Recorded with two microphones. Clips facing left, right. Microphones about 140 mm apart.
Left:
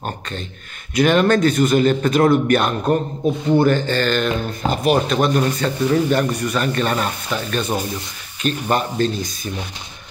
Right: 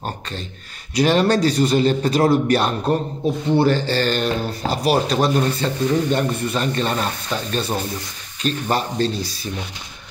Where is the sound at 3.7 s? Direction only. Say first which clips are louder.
Left 1 dB; 35° right (ahead or behind).